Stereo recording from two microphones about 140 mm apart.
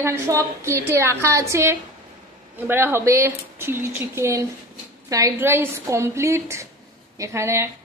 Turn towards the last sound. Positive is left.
turn(degrees=-20)  # may be behind; listen again after turning